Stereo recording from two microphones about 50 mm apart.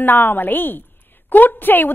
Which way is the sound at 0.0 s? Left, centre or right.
Left.